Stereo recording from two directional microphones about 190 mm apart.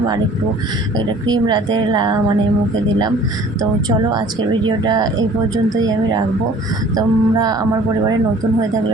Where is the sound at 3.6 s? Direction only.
20° right (ahead or behind).